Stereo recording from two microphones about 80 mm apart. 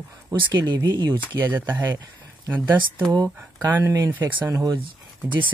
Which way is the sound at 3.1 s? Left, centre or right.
Right.